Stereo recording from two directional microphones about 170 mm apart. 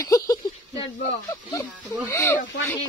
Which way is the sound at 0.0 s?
20° left (ahead or behind).